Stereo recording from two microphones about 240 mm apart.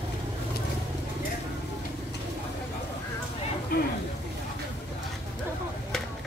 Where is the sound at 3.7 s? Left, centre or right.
Left.